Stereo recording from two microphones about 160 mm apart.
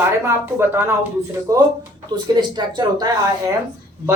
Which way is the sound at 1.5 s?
20° right (ahead or behind).